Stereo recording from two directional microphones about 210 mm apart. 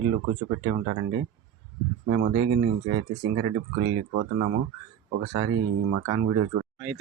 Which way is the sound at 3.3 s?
90° right.